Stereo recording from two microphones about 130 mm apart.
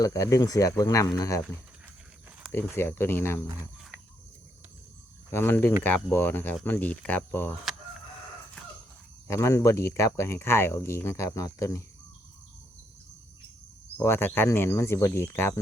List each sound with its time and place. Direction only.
0.0 s speech: 25° left (ahead or behind)
2.5 s speech: 15° left (ahead or behind)
5.3 s speech: 15° left (ahead or behind)
9.2 s speech: 25° left (ahead or behind)
14.0 s speech: 20° left (ahead or behind)